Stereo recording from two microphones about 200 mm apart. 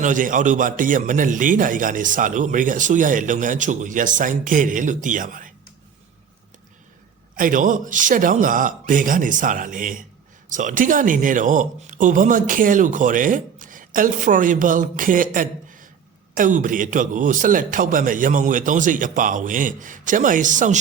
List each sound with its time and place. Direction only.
0.0 s a man's voice: 40° right (ahead or behind)
7.3 s a man's voice: 40° right (ahead or behind)